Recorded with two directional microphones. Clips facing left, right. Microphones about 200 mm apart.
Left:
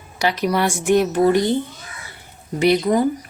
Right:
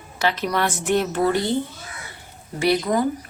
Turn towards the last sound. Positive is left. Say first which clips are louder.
# left 4 dB
turn(degrees=20)  # may be behind; listen again after turning